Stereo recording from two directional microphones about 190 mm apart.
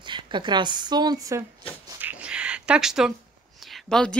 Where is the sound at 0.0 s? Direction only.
25° right (ahead or behind).